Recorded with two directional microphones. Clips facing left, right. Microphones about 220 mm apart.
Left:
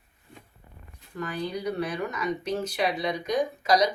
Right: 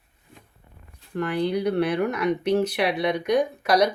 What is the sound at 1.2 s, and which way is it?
Speech, 65° right (ahead or behind).